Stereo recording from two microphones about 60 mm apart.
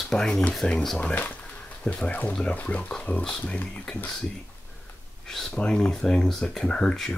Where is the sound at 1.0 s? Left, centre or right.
Left.